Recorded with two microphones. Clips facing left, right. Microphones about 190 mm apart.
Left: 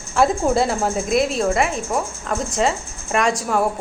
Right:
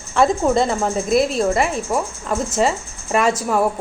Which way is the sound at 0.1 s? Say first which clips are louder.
Right 1 dB; 5° left (ahead or behind).